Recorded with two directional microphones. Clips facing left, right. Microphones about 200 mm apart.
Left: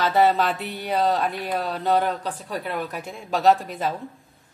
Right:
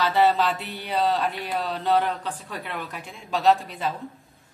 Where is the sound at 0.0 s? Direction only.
45° left (ahead or behind).